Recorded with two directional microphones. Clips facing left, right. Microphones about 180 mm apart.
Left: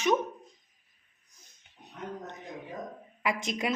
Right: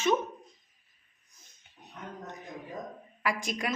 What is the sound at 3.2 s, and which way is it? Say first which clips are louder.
Speech: left 2 dB; 20° left (ahead or behind).